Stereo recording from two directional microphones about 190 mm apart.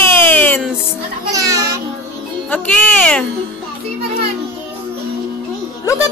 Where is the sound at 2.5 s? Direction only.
5° left (ahead or behind).